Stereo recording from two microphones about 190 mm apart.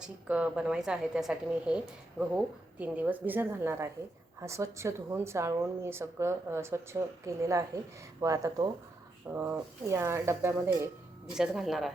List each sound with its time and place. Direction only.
0.0 s a woman's voice: 5° right (ahead or behind)
11.3 s speech: centre (ahead or behind)